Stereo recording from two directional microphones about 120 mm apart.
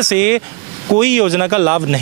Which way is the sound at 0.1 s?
20° right (ahead or behind).